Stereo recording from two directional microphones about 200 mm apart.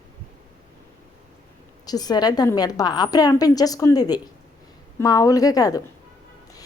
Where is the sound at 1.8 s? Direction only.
20° left (ahead or behind).